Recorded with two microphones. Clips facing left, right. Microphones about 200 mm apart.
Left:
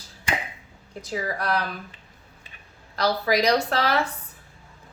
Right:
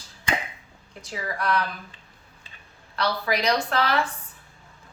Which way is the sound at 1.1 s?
35° left (ahead or behind).